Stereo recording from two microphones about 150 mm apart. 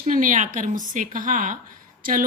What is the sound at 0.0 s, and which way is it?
A woman's voice, 60° right (ahead or behind).